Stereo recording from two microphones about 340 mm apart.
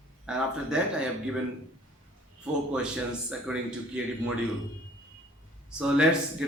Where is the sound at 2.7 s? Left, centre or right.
Centre.